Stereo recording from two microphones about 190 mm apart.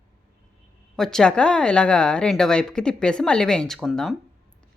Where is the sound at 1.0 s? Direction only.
5° left (ahead or behind).